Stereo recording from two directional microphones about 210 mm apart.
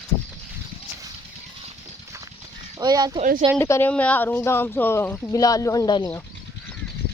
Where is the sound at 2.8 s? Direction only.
20° right (ahead or behind).